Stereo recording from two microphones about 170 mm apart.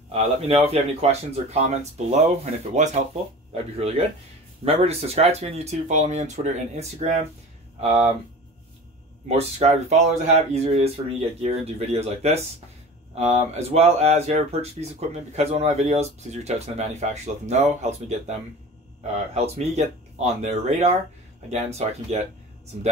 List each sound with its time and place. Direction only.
0.1 s speech: 35° right (ahead or behind)
9.3 s speech: 40° right (ahead or behind)
19.3 s speech: 40° right (ahead or behind)